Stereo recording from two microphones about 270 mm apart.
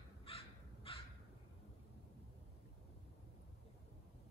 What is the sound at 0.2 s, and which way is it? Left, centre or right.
Crow, centre.